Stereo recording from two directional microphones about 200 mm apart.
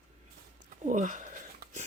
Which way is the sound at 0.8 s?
40° right (ahead or behind).